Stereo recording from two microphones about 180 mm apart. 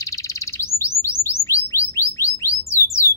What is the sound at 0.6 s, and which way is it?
Bird, 15° left (ahead or behind).